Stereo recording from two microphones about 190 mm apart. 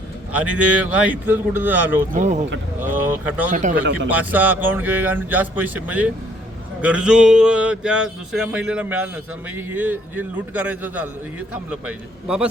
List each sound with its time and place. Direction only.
0.3 s a man's voice: 5° right (ahead or behind)
2.1 s speech: 40° right (ahead or behind)
2.8 s a man's voice: 10° right (ahead or behind)
3.5 s speech: 40° right (ahead or behind)
4.1 s a man's voice: 10° right (ahead or behind)